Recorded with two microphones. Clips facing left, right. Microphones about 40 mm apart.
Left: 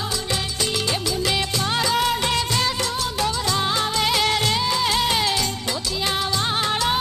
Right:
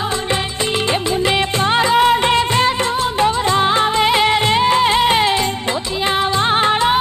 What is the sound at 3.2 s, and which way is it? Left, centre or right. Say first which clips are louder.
Music: right 8 dB; right.